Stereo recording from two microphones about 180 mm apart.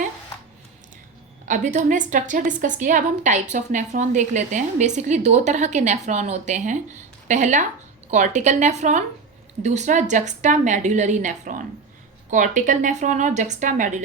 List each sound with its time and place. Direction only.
1.5 s a woman's voice: 45° right (ahead or behind)